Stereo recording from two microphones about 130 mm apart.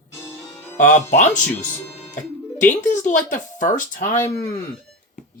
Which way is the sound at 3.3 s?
80° left.